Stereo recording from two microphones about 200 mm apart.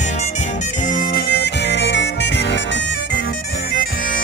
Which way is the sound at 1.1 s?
55° left (ahead or behind).